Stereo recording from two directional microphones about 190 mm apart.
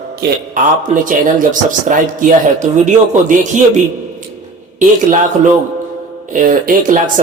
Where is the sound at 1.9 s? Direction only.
40° right (ahead or behind).